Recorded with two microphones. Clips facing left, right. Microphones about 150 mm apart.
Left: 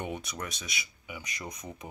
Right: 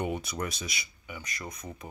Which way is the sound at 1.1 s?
15° left (ahead or behind).